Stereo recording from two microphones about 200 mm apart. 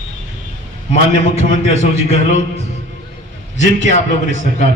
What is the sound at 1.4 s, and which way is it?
A man's voice, 30° left (ahead or behind).